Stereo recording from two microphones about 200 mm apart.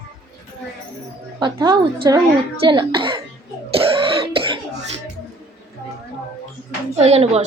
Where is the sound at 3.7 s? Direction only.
30° right (ahead or behind).